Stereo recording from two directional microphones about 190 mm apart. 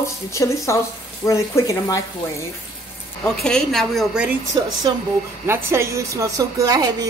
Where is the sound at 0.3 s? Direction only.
15° left (ahead or behind).